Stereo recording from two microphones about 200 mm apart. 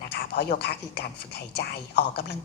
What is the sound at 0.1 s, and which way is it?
A woman's voice, 55° left (ahead or behind).